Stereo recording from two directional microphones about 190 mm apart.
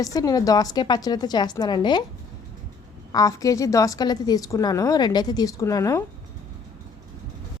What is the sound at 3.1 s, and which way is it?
A woman's voice, 15° left (ahead or behind).